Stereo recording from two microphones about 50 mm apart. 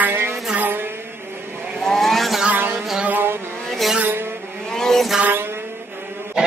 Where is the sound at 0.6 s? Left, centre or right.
Right.